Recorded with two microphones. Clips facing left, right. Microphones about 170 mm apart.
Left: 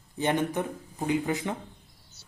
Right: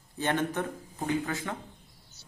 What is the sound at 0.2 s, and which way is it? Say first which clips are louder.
Speech: left 2 dB; 15° left (ahead or behind).